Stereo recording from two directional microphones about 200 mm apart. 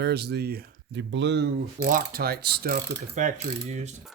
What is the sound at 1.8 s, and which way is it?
Mechanisms, 45° right (ahead or behind).